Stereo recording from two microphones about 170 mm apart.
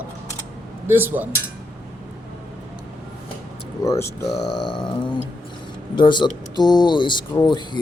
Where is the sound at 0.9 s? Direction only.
10° right (ahead or behind).